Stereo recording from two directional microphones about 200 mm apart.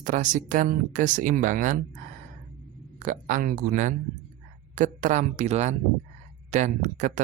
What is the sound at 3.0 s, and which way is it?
Speech, 40° right (ahead or behind).